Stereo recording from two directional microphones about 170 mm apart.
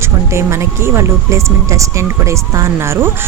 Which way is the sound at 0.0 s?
15° right (ahead or behind).